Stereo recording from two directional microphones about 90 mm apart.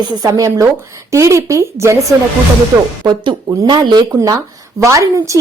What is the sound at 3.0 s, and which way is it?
Speech, 50° right (ahead or behind).